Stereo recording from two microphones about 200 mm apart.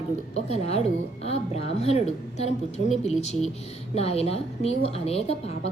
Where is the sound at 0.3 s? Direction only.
30° left (ahead or behind).